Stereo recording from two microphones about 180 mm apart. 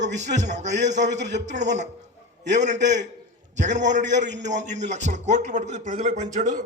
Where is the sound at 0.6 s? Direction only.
75° right (ahead or behind).